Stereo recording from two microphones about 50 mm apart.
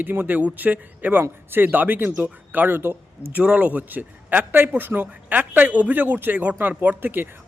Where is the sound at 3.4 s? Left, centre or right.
Right.